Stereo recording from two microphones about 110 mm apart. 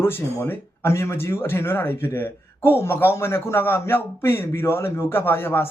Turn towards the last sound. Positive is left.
turn(degrees=20)  # may be behind; listen again after turning